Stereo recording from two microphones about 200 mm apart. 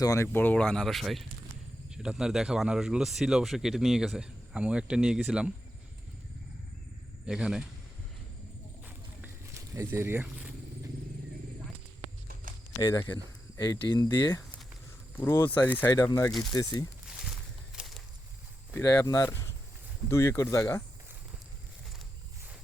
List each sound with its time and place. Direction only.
0.0 s speech: 15° left (ahead or behind); by 5.5 s 5° right (ahead or behind)
7.3 s speech: 5° right (ahead or behind)
8.8 s a sound: 10° right (ahead or behind)
12.7 s speech: 20° left (ahead or behind)
16.3 s speech: centre (ahead or behind)
16.6 s speech: 20° left (ahead or behind)
17.1 s a sound: centre (ahead or behind)
18.7 s speech: 15° left (ahead or behind)